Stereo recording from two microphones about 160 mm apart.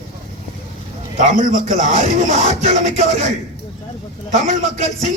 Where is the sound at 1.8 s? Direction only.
45° left (ahead or behind).